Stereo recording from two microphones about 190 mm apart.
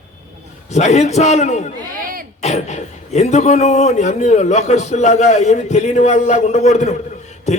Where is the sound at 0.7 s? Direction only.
35° left (ahead or behind).